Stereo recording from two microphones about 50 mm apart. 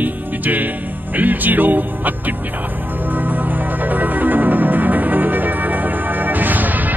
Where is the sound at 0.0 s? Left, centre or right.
Right.